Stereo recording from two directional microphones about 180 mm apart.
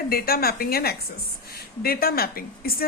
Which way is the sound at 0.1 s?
55° left (ahead or behind).